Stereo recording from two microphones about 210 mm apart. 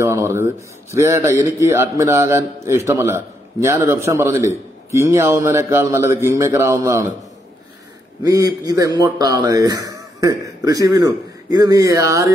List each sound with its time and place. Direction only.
0.0 s speech: 15° right (ahead or behind)
8.2 s speech: 15° right (ahead or behind)